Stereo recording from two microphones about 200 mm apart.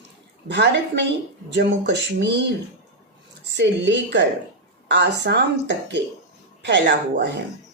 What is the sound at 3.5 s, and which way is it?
Speech, 60° right (ahead or behind).